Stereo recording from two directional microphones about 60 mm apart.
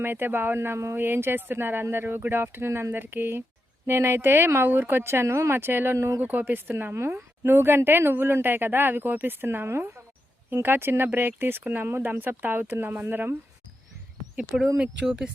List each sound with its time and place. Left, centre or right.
0.0 s speech: right
2.9 s speech: right
6.2 s a woman's voice: right